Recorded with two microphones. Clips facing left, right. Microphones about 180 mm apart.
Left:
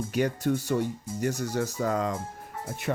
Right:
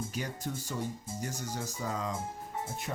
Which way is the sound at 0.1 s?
70° left (ahead or behind).